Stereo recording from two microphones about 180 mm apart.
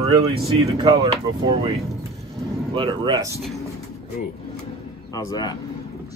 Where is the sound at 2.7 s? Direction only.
25° right (ahead or behind).